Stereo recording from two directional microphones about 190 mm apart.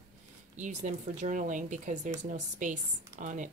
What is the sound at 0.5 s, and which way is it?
Speech, 40° right (ahead or behind).